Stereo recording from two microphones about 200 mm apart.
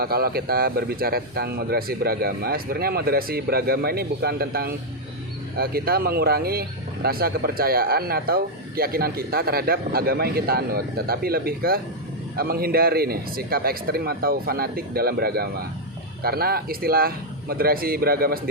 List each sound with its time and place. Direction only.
0.0 s speech: 50° right (ahead or behind)